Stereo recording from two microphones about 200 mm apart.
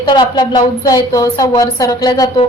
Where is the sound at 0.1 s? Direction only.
20° left (ahead or behind).